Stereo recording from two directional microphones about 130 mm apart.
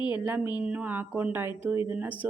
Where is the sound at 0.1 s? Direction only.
10° right (ahead or behind).